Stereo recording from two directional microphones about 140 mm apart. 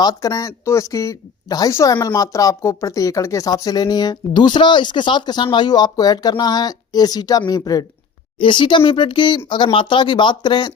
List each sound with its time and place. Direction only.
0.0 s a woman's voice: 30° left (ahead or behind)